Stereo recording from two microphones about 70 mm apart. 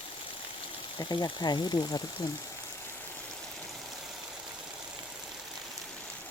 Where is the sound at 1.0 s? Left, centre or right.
Left.